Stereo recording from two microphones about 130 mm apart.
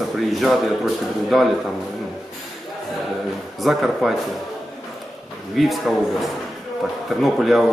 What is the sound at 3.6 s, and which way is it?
Speech, centre (ahead or behind).